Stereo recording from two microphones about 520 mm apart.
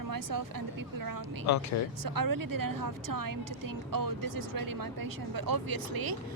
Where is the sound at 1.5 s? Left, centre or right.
Left.